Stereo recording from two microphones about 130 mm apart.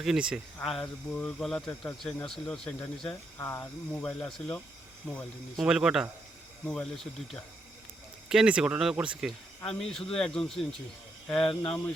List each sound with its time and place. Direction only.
0.0 s speech: 5° right (ahead or behind)
3.3 s speech: 20° left (ahead or behind)
5.5 s speech: 5° right (ahead or behind)